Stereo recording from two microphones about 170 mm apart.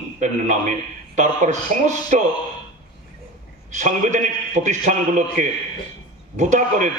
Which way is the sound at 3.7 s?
45° right (ahead or behind).